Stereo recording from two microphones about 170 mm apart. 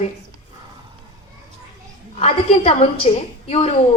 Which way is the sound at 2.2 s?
35° left (ahead or behind).